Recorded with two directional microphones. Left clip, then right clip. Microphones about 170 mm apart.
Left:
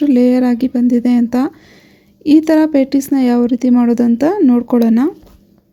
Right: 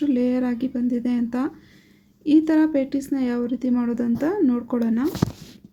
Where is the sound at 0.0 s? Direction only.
45° left (ahead or behind).